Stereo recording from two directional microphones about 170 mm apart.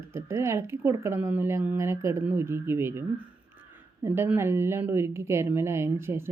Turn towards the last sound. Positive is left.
turn(degrees=-15)  # may be behind; listen again after turning